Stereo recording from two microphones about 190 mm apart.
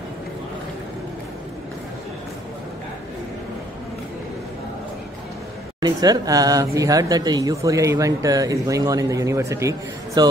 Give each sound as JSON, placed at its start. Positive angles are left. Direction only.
{"t": 5.8, "sound": "speech", "side_deg": -20}